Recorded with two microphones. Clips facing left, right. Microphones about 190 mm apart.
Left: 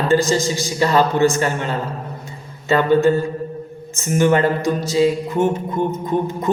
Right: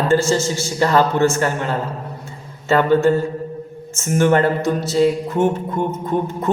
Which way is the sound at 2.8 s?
15° left (ahead or behind).